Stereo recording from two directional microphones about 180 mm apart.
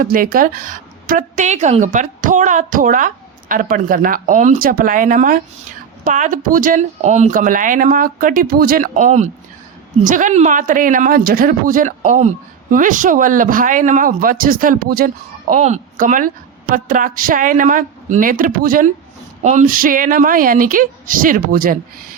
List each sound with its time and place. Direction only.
0.0 s speech: 50° right (ahead or behind)
19.4 s speech: 40° right (ahead or behind)